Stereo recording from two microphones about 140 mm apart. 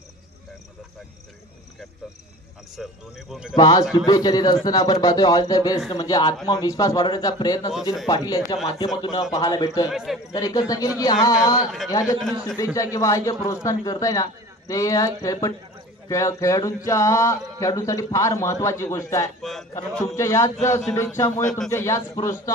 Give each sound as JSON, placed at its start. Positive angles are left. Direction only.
{"t": 2.7, "sound": "speech", "side_deg": 0}
{"t": 3.5, "sound": "speech", "side_deg": 30}
{"t": 9.8, "sound": "speech", "side_deg": 0}
{"t": 10.3, "sound": "speech", "side_deg": 25}
{"t": 12.2, "sound": "speech", "side_deg": 0}
{"t": 12.5, "sound": "speech", "side_deg": 20}
{"t": 19.9, "sound": "speech", "side_deg": 5}
{"t": 20.2, "sound": "speech", "side_deg": 20}
{"t": 21.6, "sound": "speech", "side_deg": 20}